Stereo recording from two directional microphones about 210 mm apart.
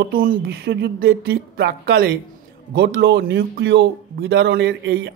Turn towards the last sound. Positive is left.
turn(degrees=-55)  # may be behind; listen again after turning